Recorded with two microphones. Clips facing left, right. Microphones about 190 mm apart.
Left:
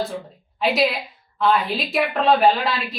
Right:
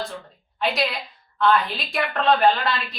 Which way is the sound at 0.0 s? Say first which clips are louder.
Left 5 dB; 15° left (ahead or behind).